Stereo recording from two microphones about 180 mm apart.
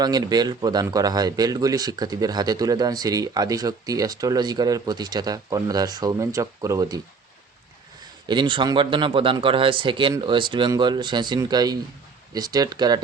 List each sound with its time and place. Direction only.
0.0 s speech: 20° right (ahead or behind)
8.3 s speech: 25° right (ahead or behind)